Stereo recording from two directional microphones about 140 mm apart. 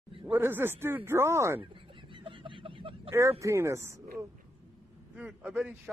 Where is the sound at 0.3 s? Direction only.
15° right (ahead or behind).